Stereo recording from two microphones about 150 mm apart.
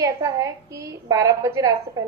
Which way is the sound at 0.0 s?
20° right (ahead or behind).